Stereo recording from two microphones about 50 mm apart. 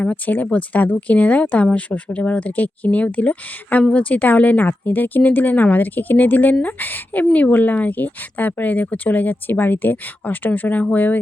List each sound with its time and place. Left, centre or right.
0.0 s speech: left